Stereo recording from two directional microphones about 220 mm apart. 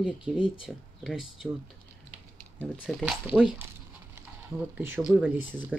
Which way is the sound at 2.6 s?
5° right (ahead or behind).